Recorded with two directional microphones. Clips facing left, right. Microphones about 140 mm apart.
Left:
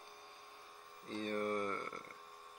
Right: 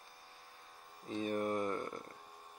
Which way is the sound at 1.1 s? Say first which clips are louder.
Right 4 dB; 5° right (ahead or behind).